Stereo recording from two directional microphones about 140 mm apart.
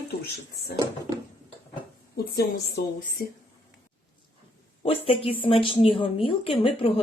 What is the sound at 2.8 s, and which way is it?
Speech, 90° left.